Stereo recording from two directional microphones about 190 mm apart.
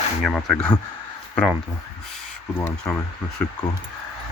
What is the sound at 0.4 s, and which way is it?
Speech, 5° left (ahead or behind).